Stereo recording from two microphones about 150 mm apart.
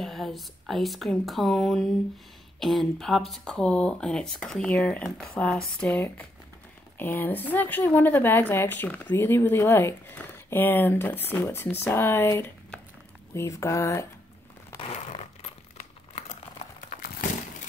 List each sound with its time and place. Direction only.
0.0 s speech: centre (ahead or behind); by 14.0 s 20° left (ahead or behind)
14.8 s crumpling: 40° left (ahead or behind)